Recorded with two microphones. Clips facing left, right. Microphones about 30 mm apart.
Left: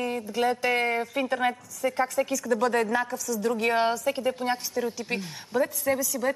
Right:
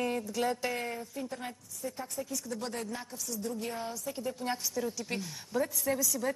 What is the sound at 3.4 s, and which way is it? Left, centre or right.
Speech, left.